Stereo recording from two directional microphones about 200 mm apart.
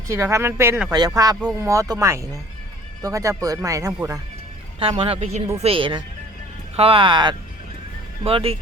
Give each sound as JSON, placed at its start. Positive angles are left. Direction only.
{"t": 0.1, "sound": "speech", "side_deg": -15}
{"t": 4.8, "sound": "a man's voice", "side_deg": -25}